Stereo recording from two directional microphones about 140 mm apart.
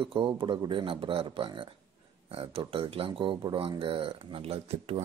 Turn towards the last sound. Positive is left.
turn(degrees=-45)  # may be behind; listen again after turning